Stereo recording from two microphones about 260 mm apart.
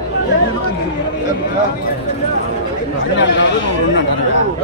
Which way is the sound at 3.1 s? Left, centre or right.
Left.